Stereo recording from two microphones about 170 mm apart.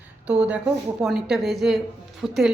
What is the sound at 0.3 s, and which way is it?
A woman's voice, 10° right (ahead or behind).